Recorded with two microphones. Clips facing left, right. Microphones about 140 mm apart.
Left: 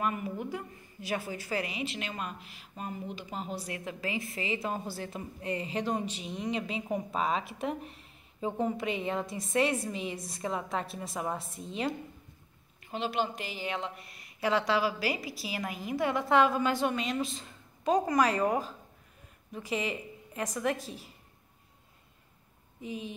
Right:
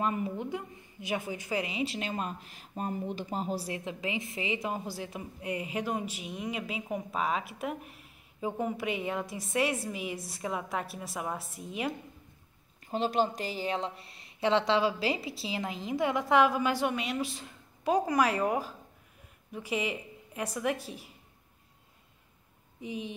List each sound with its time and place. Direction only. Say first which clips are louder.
0.0 s a woman's voice: right 1 dB; 25° right (ahead or behind); by 11.9 s 10° right (ahead or behind)
12.8 s a woman's voice: right 3 dB; 40° right (ahead or behind); by 21.1 s 10° right (ahead or behind)
22.8 s a woman's voice: right 1 dB; 15° right (ahead or behind)